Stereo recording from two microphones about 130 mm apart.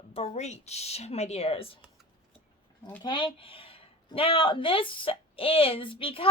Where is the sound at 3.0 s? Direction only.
40° left (ahead or behind).